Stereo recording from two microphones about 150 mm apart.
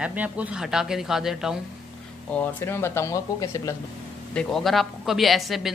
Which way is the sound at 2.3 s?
15° left (ahead or behind).